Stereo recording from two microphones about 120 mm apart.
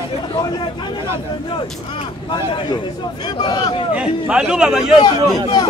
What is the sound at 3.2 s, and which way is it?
Speech, 35° left (ahead or behind).